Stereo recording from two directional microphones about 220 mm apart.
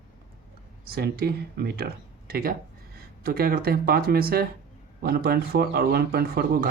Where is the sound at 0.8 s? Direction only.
45° right (ahead or behind).